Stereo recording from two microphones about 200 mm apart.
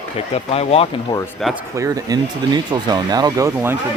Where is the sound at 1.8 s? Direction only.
15° right (ahead or behind).